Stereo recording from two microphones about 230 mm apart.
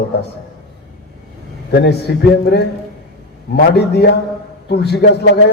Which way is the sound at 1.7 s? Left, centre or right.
Left.